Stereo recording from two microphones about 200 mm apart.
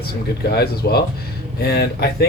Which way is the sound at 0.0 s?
50° left (ahead or behind).